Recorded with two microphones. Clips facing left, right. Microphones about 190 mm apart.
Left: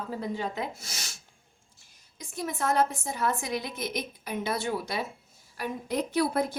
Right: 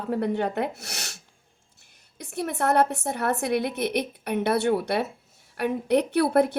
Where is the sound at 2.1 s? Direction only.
65° right (ahead or behind).